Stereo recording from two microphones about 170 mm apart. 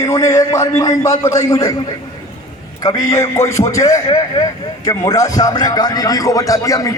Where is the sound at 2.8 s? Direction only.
20° left (ahead or behind).